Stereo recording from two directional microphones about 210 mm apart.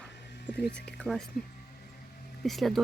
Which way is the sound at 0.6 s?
50° left (ahead or behind).